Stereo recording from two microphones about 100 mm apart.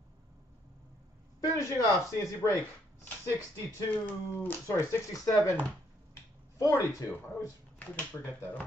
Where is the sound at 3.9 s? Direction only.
20° left (ahead or behind).